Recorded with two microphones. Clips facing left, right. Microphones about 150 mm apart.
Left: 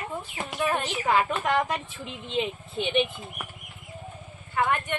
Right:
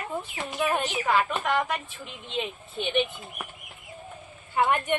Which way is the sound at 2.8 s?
20° left (ahead or behind).